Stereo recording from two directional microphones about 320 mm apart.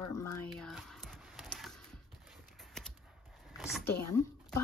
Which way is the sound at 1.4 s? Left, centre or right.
Centre.